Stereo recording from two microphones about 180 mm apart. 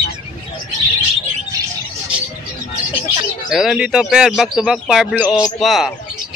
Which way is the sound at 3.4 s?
Centre (ahead or behind).